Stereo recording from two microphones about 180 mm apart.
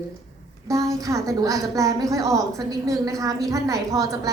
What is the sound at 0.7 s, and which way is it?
A woman's voice, 20° right (ahead or behind).